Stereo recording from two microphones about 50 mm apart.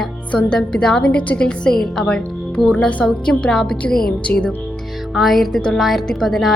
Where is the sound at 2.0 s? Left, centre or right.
Centre.